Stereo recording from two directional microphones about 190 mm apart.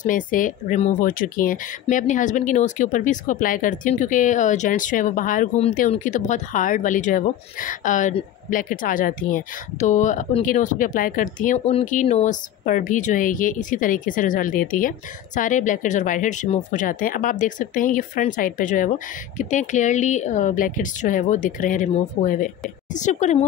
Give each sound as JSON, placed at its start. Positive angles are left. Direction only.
{"t": 0.0, "sound": "a woman's voice", "side_deg": 45}